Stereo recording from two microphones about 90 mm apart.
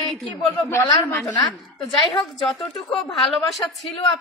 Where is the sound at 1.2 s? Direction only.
40° left (ahead or behind).